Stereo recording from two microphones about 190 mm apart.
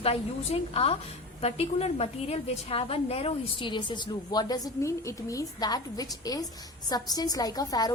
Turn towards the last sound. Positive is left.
turn(degrees=20)  # may be behind; listen again after turning